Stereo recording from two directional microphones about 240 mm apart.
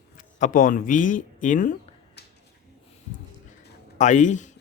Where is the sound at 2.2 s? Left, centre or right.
Left.